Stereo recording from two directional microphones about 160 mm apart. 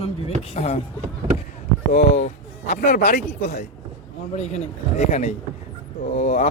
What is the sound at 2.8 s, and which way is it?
Speech, 60° left (ahead or behind).